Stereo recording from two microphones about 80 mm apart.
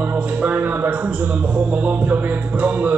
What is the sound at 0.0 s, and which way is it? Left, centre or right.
Speech, right.